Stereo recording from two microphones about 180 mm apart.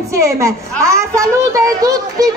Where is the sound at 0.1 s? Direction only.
15° right (ahead or behind).